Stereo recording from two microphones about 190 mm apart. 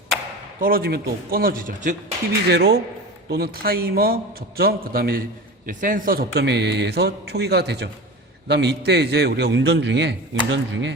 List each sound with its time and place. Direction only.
0.6 s a man's voice: 50° right (ahead or behind)
2.5 s a man's voice: 55° right (ahead or behind)
6.3 s a man's voice: 65° right (ahead or behind)